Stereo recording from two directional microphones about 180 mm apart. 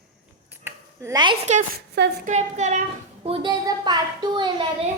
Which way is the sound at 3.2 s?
30° right (ahead or behind).